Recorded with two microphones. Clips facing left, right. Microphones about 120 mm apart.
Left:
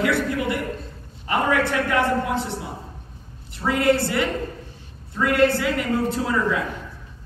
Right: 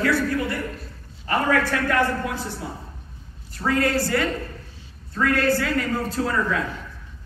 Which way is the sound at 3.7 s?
20° left (ahead or behind).